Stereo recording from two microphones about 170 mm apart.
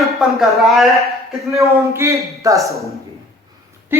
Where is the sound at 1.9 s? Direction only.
15° right (ahead or behind).